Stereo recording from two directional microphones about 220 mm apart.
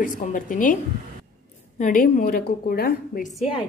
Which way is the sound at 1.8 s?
40° left (ahead or behind).